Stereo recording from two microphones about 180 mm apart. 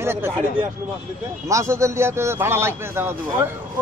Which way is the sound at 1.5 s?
15° right (ahead or behind).